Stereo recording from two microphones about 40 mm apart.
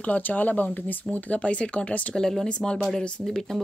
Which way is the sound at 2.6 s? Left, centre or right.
Centre.